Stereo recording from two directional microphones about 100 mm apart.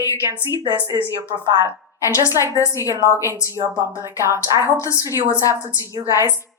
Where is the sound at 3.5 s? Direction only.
30° right (ahead or behind).